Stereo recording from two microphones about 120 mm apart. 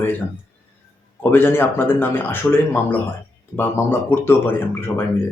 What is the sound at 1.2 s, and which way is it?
Speech, 20° left (ahead or behind).